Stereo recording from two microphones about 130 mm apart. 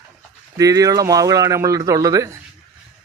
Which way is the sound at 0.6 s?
25° right (ahead or behind).